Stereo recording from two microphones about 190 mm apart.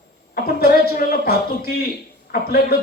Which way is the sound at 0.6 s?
55° left (ahead or behind).